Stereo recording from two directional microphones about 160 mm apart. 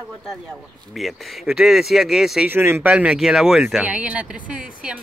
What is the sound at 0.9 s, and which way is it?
Speech, centre (ahead or behind).